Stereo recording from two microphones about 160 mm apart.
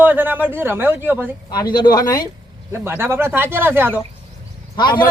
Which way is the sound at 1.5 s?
25° left (ahead or behind).